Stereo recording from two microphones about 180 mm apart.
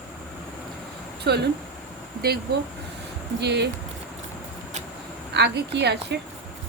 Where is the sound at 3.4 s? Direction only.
70° right (ahead or behind).